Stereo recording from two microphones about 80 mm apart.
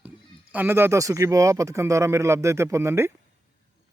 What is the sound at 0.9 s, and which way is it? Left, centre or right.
Speech, right.